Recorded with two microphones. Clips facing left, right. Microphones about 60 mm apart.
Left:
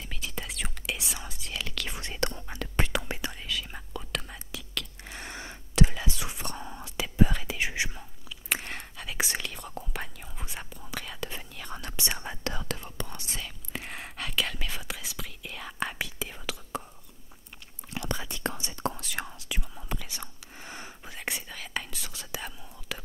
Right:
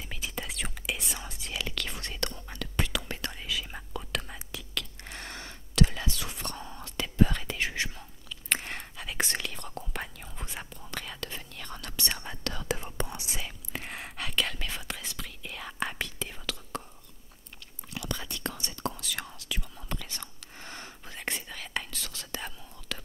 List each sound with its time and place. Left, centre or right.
0.1 s whispering: centre
2.0 s whispering: left
3.3 s whispering: centre
5.2 s a sound: centre
6.0 s whispering: centre
11.1 s whispering: centre
12.6 s whispering: right
13.7 s whispering: centre
18.1 s whispering: centre
18.9 s whispering: left; by 22.0 s centre
22.0 s whispering: centre